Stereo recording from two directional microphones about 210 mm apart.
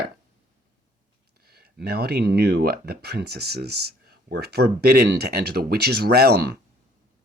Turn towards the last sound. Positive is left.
turn(degrees=-50)  # may be behind; listen again after turning